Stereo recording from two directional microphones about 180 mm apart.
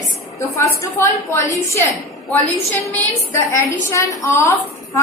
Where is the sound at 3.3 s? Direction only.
15° left (ahead or behind).